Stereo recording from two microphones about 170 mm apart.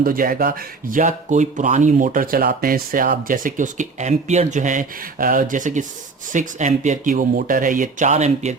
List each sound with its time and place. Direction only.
0.0 s speech: 55° right (ahead or behind)